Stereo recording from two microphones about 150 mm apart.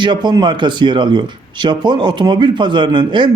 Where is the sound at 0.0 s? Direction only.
30° right (ahead or behind).